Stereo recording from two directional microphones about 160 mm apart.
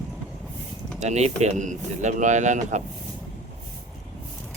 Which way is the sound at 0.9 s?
45° right (ahead or behind).